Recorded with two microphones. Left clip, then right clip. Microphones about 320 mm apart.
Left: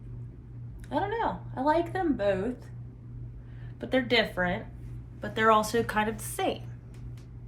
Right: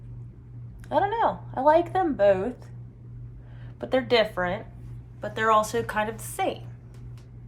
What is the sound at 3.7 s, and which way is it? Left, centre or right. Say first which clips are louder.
A woman's voice: right 4 dB; centre.